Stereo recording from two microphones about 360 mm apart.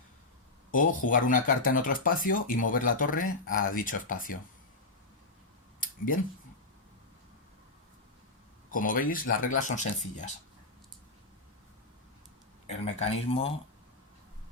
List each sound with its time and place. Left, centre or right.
0.7 s speech: left
8.7 s speech: left
12.6 s speech: centre